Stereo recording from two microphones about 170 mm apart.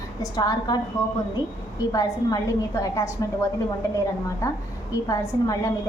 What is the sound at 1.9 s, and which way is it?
A woman's voice, 20° left (ahead or behind).